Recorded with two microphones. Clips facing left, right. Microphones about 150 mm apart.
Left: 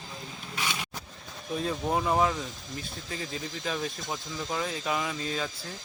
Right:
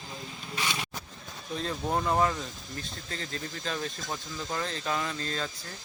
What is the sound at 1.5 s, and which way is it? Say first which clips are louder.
Speech: left 2 dB; 5° left (ahead or behind).